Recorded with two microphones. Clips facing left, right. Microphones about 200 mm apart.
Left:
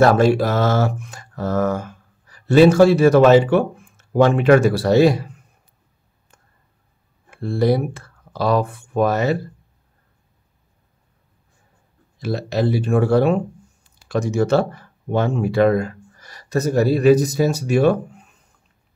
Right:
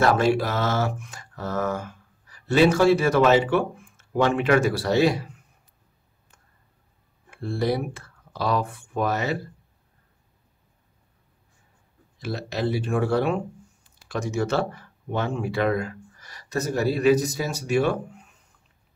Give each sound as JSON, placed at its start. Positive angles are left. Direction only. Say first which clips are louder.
{"t": 0.0, "sound": "speech", "louder": "left 6 dB", "side_deg": 40}
{"t": 7.2, "sound": "speech", "louder": "left 7 dB", "side_deg": 40}
{"t": 12.2, "sound": "speech", "louder": "left 7 dB", "side_deg": 40}